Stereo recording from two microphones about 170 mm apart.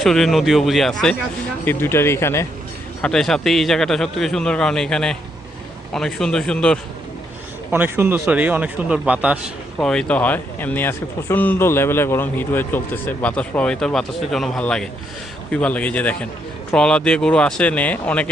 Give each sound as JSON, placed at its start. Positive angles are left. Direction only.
{"t": 0.0, "sound": "a man's voice", "side_deg": 0}
{"t": 1.6, "sound": "speech", "side_deg": 15}
{"t": 3.0, "sound": "a man's voice", "side_deg": 0}
{"t": 7.7, "sound": "a man's voice", "side_deg": -15}
{"t": 9.7, "sound": "speech", "side_deg": 5}